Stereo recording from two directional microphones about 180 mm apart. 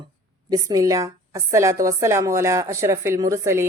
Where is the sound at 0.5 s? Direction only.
20° right (ahead or behind).